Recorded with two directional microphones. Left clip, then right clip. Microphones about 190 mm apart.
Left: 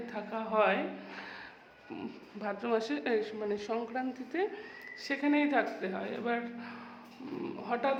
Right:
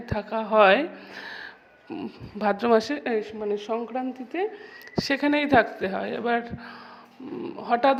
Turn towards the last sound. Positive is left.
turn(degrees=-40)  # may be behind; listen again after turning